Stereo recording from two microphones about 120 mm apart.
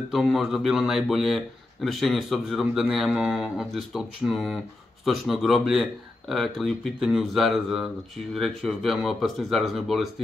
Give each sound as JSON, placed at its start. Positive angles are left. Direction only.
{"t": 0.1, "sound": "speech", "side_deg": -5}